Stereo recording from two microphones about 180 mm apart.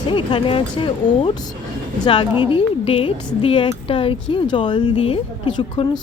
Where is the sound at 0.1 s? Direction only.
30° left (ahead or behind).